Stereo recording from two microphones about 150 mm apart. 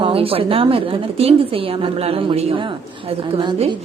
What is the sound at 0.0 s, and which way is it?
Speech, 40° right (ahead or behind).